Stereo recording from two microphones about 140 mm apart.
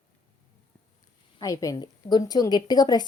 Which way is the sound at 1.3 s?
25° left (ahead or behind).